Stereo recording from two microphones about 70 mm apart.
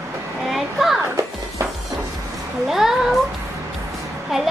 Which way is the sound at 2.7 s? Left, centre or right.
Centre.